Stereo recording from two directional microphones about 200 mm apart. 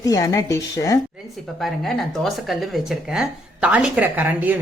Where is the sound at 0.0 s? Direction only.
15° left (ahead or behind).